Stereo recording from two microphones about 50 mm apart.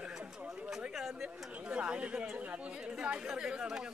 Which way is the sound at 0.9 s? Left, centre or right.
Centre.